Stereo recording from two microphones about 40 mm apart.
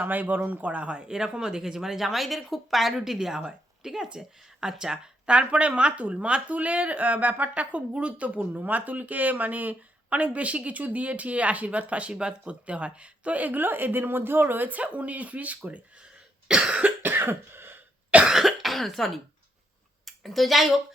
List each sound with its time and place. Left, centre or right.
0.0 s a woman's voice: right; by 4.7 s centre
5.2 s speech: right
14.7 s speech: right
16.5 s cough: right
17.0 s cough: right
18.1 s speech: right
18.4 s cough: centre
20.1 s speech: centre